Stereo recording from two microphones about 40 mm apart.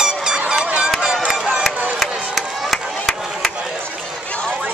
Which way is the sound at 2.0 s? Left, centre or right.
Centre.